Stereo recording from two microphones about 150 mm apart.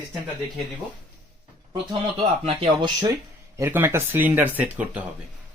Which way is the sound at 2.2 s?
40° right (ahead or behind).